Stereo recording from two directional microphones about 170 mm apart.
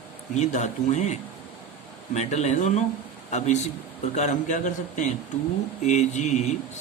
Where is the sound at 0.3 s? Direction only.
45° left (ahead or behind).